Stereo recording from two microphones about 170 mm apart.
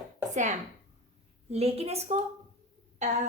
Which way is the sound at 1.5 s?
35° right (ahead or behind).